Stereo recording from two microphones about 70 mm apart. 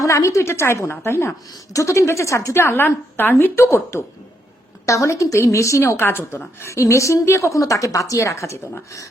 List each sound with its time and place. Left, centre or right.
0.0 s a woman's voice: left